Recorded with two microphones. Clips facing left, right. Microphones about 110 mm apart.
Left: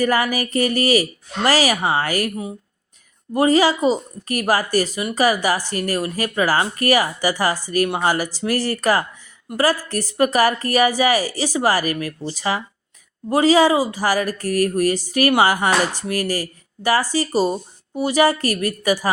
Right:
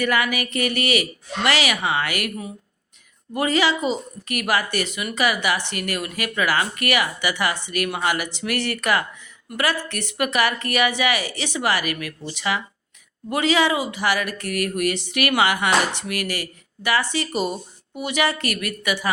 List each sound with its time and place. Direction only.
0.0 s speech: 35° left (ahead or behind)
3.3 s speech: 35° left (ahead or behind)